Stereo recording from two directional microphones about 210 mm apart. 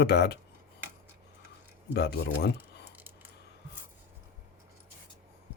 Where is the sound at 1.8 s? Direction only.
55° left (ahead or behind).